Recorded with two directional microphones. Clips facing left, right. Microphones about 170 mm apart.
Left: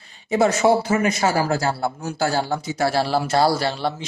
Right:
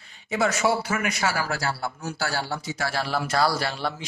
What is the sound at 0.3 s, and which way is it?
A woman's voice, 35° left (ahead or behind).